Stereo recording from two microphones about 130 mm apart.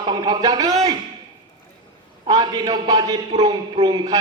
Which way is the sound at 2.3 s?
30° right (ahead or behind).